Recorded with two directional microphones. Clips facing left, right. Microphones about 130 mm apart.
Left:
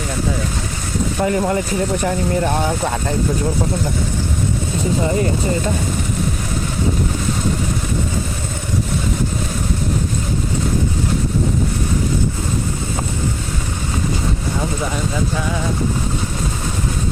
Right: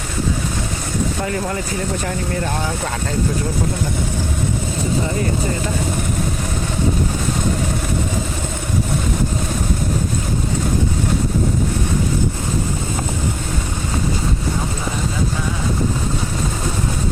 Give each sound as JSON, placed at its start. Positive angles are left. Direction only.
{"t": 1.2, "sound": "speech", "side_deg": 25}